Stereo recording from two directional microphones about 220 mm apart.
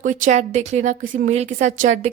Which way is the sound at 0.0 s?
35° right (ahead or behind).